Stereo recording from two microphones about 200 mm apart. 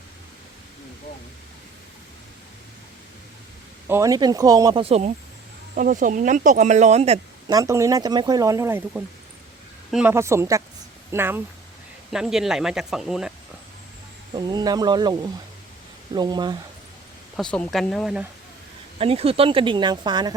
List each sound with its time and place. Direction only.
3.8 s speech: 15° right (ahead or behind); by 5.1 s 30° right (ahead or behind)
5.7 s speech: 40° right (ahead or behind)
7.4 s speech: 15° right (ahead or behind); by 13.3 s centre (ahead or behind)
14.3 s speech: 20° right (ahead or behind)
17.3 s speech: 5° left (ahead or behind)
18.9 s speech: 30° right (ahead or behind)